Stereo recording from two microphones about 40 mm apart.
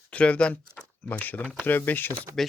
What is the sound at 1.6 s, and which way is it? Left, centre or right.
Speech, left.